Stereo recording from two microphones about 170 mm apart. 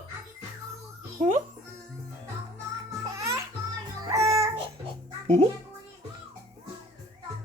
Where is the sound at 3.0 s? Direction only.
20° right (ahead or behind).